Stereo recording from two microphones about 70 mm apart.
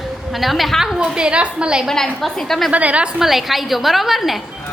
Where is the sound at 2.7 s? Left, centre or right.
Centre.